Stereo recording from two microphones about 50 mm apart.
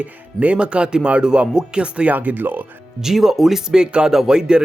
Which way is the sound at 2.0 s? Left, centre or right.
Right.